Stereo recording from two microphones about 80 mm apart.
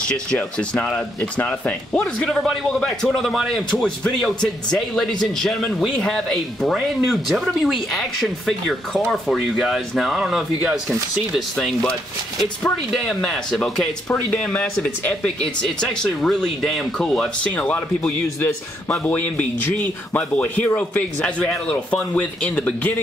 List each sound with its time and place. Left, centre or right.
0.1 s a man's voice: centre
11.3 s speech: centre
14.5 s a man's voice: centre
18.4 s a man's voice: left